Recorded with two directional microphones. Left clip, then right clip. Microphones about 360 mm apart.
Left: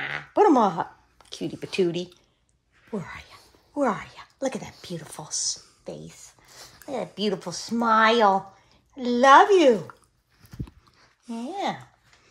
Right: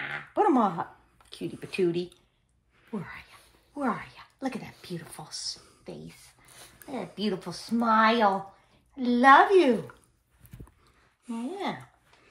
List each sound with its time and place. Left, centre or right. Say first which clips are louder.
0.0 s a sound: left 6 dB; left
0.6 s speech: left 5 dB; left
11.2 s speech: left 4 dB; left